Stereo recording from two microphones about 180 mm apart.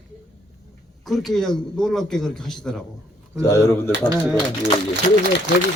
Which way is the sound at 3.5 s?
20° left (ahead or behind).